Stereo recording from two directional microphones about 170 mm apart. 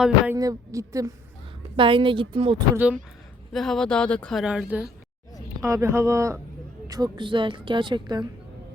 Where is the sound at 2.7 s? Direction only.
10° right (ahead or behind).